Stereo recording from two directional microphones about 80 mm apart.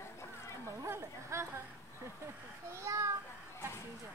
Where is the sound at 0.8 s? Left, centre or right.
Right.